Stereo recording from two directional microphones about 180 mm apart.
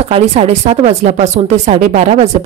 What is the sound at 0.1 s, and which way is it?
Speech, 35° right (ahead or behind).